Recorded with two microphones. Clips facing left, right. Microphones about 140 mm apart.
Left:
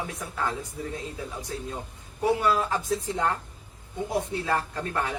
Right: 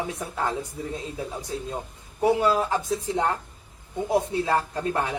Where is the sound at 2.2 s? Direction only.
25° right (ahead or behind).